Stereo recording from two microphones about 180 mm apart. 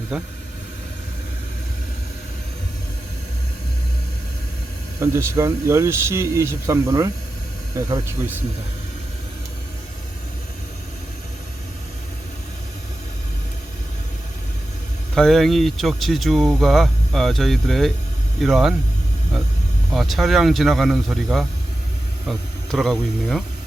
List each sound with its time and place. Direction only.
0.1 s speech: 5° right (ahead or behind)
4.9 s speech: 15° right (ahead or behind)
15.1 s speech: centre (ahead or behind)
19.9 s speech: centre (ahead or behind)